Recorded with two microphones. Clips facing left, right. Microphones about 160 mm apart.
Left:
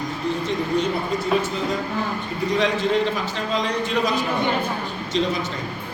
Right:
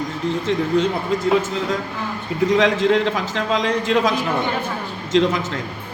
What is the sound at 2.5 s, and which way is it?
Speech, 90° right.